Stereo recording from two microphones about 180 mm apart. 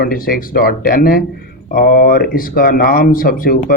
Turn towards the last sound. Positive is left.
turn(degrees=55)  # may be behind; listen again after turning